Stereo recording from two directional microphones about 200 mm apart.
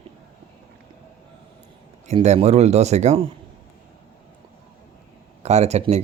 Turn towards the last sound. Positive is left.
turn(degrees=-35)  # may be behind; listen again after turning